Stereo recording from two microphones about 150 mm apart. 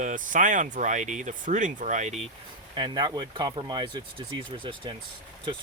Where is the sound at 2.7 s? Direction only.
30° right (ahead or behind).